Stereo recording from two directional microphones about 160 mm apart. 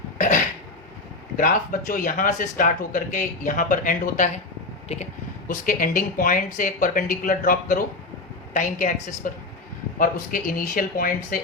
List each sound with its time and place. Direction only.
0.2 s cough: 55° left (ahead or behind)
1.9 s speech: 60° left (ahead or behind)
5.5 s speech: 55° left (ahead or behind)